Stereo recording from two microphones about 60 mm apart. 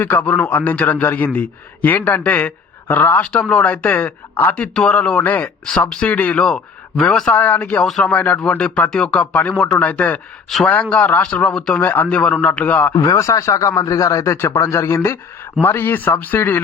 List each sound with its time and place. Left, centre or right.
0.0 s a man's voice: left
3.3 s speech: centre
4.7 s speech: centre
5.2 s a man's voice: left
5.9 s speech: centre
6.4 s speech: centre
7.3 s speech: left
11.7 s speech: left
13.0 s speech: left
14.3 s speech: left
15.6 s a man's voice: left